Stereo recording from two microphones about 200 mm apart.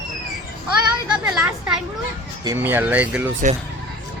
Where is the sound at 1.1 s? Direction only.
5° right (ahead or behind).